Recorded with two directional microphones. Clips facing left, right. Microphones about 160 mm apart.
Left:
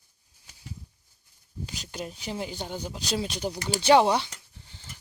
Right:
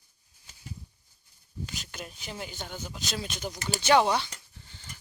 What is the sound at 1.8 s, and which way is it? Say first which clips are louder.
Speech: left 6 dB; 30° left (ahead or behind).